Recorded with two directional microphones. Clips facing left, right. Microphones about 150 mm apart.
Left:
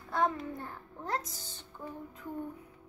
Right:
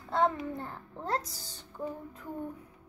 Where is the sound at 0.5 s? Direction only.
30° right (ahead or behind).